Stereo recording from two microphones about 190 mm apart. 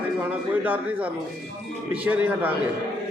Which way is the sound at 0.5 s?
10° right (ahead or behind).